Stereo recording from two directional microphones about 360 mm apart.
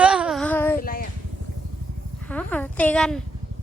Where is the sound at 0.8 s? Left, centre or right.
Left.